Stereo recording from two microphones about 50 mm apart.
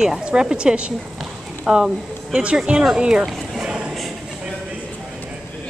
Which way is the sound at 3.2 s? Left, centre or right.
Centre.